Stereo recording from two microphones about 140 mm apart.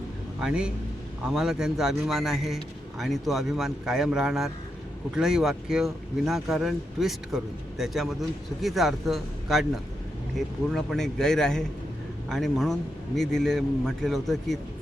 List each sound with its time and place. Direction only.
0.3 s speech: 5° right (ahead or behind)